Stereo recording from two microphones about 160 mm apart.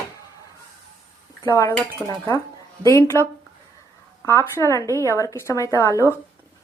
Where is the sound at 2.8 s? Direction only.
20° left (ahead or behind).